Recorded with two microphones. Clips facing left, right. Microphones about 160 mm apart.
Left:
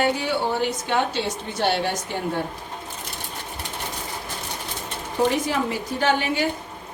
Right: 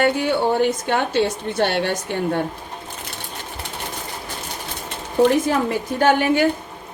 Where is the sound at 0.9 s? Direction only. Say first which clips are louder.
Right 4 dB; 60° right (ahead or behind).